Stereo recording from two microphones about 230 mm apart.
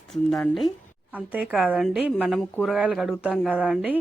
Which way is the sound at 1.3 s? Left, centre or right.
Centre.